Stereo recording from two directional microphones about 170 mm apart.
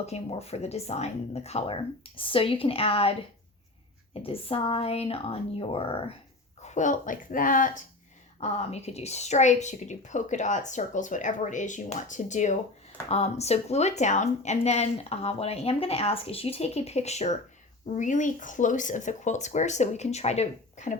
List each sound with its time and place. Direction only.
0.0 s speech: 40° left (ahead or behind)
6.6 s a woman's voice: 45° left (ahead or behind)
8.4 s a woman's voice: 40° left (ahead or behind)